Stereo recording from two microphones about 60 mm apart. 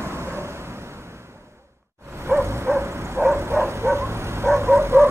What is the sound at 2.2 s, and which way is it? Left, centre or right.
Bow-wow, right.